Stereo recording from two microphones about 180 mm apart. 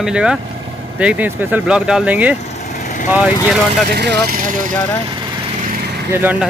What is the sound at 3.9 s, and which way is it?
Speech, 55° right (ahead or behind).